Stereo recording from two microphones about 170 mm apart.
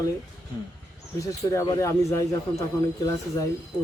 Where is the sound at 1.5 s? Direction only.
20° left (ahead or behind).